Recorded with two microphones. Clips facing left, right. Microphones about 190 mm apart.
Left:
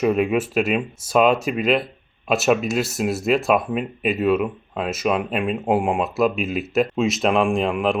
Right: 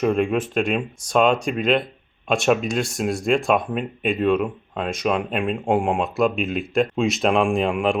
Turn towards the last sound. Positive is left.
turn(degrees=0)  # may be behind; listen again after turning